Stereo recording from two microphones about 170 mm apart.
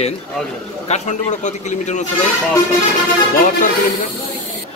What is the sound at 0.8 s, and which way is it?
Speech, 40° left (ahead or behind).